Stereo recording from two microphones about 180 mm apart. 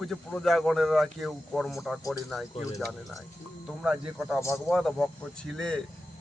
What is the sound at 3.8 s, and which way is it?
Speech, 5° right (ahead or behind).